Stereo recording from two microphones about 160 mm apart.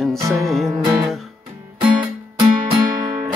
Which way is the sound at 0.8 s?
5° right (ahead or behind).